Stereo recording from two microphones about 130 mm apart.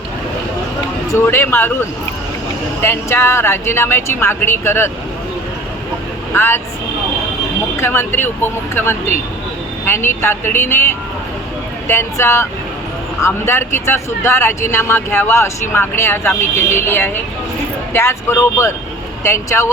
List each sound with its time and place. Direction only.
1.1 s speech: 20° left (ahead or behind)
2.8 s speech: 20° left (ahead or behind)
6.3 s speech: 20° left (ahead or behind)
7.8 s speech: 15° left (ahead or behind)
11.9 s speech: 20° left (ahead or behind)